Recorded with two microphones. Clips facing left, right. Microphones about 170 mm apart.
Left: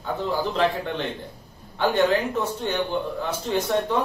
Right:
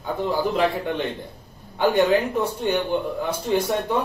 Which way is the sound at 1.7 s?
10° right (ahead or behind).